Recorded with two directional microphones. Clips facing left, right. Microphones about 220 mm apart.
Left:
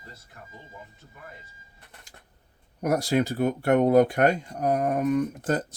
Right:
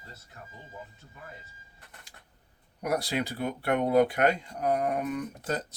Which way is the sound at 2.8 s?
45° left (ahead or behind).